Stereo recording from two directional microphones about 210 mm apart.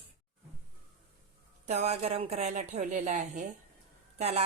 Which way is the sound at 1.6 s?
30° right (ahead or behind).